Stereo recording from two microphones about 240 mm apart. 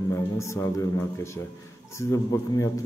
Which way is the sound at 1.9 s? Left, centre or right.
Centre.